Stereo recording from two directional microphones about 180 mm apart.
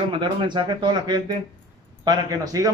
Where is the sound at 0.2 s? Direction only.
25° right (ahead or behind).